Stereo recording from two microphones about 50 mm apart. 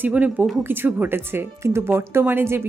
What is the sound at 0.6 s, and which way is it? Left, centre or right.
Speech, right.